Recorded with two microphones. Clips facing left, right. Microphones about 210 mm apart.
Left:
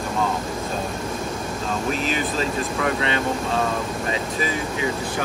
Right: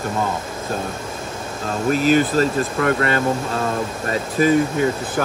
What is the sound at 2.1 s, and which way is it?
Speech, 45° right (ahead or behind).